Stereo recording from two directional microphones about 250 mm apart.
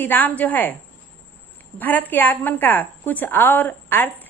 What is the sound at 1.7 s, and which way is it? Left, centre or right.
A woman's voice, centre.